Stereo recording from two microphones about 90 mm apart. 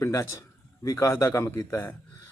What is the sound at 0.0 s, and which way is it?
A man's voice, 30° left (ahead or behind).